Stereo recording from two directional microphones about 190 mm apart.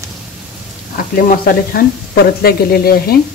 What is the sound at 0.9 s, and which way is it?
Speech, 50° left (ahead or behind).